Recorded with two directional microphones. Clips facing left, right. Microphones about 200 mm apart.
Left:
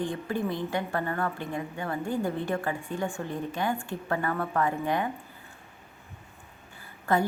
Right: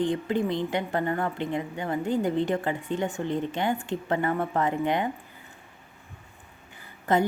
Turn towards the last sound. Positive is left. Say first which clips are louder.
# right 2 dB
turn(degrees=-20)  # may be behind; listen again after turning